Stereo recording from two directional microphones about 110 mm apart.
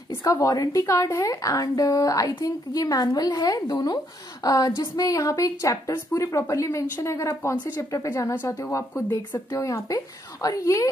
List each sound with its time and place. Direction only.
0.1 s a woman's voice: 30° left (ahead or behind)